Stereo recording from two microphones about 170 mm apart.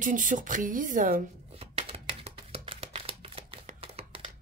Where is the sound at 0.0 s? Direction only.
50° right (ahead or behind).